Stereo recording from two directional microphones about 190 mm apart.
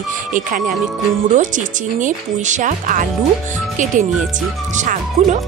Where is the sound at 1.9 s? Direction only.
40° right (ahead or behind).